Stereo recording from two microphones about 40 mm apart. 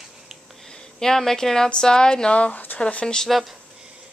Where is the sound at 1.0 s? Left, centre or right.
Centre; by 2.5 s left.